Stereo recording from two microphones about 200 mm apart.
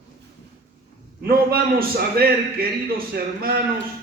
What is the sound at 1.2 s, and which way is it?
A man's voice, 50° right (ahead or behind).